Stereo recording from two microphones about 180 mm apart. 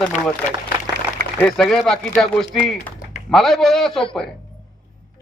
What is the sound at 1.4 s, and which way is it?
A man's voice, 5° left (ahead or behind).